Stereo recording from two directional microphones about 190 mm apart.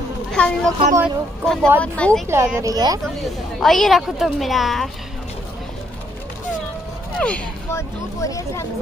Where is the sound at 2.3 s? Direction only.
15° right (ahead or behind).